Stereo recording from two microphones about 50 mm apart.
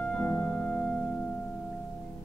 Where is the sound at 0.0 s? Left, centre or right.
Left.